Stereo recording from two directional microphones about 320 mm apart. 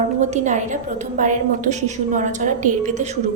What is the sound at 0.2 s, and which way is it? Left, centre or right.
A woman's voice, right.